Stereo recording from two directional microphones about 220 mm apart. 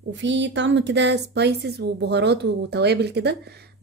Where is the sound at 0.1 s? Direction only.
55° right (ahead or behind).